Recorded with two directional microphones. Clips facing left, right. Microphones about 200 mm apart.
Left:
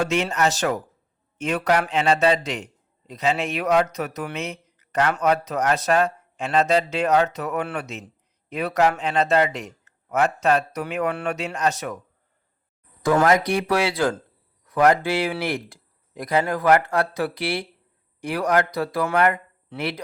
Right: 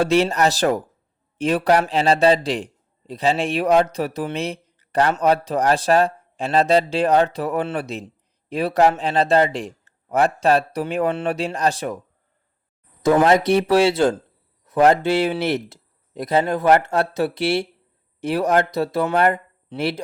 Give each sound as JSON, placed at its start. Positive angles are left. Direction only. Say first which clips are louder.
{"t": 0.0, "sound": "a man's voice", "louder": "right 5 dB", "side_deg": -35}
{"t": 13.0, "sound": "speech", "louder": "right 3 dB", "side_deg": -25}